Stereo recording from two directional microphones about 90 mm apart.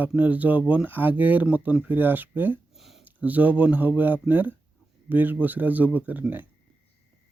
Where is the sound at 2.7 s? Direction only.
5° right (ahead or behind).